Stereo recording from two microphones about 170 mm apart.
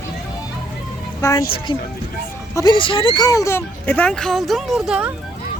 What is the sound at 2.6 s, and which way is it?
Speech, 25° left (ahead or behind).